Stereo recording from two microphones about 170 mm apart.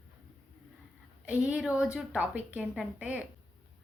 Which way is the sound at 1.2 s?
5° right (ahead or behind).